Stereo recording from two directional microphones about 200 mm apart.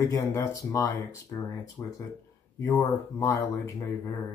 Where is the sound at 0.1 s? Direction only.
15° left (ahead or behind).